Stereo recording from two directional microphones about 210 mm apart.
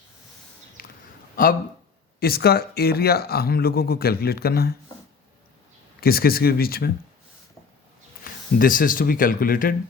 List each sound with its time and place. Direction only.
0.8 s a sound: 45° left (ahead or behind)
2.2 s speech: 45° left (ahead or behind)
6.0 s speech: 45° left (ahead or behind)
8.2 s speech: 40° left (ahead or behind)